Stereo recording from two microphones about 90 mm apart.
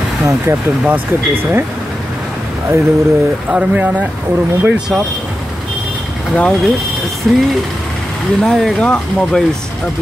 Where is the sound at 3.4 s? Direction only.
15° right (ahead or behind).